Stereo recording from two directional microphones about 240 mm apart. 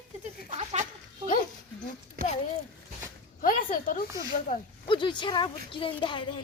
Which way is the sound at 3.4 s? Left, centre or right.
Left.